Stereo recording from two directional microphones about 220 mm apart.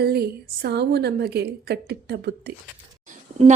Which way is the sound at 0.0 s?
45° right (ahead or behind).